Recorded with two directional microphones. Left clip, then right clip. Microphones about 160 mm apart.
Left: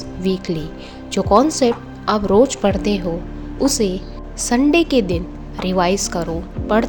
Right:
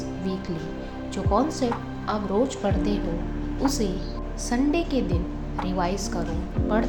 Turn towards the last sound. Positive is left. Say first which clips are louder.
# left 7 dB
turn(degrees=55)  # may be behind; listen again after turning